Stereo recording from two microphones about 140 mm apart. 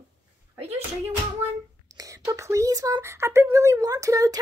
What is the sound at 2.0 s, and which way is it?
Speech, 25° right (ahead or behind).